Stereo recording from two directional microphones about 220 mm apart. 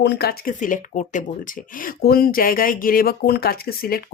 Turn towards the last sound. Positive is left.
turn(degrees=45)  # may be behind; listen again after turning